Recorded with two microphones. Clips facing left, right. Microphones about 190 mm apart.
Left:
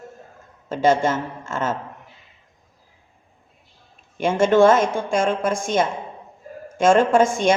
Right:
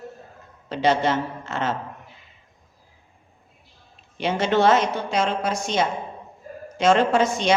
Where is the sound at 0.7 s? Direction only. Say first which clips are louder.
Left 2 dB; 45° left (ahead or behind).